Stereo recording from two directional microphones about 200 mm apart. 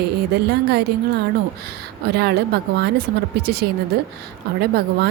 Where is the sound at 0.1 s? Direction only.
55° right (ahead or behind).